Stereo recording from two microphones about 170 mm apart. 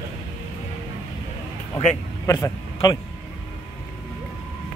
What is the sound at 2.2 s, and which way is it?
Speech, 20° left (ahead or behind).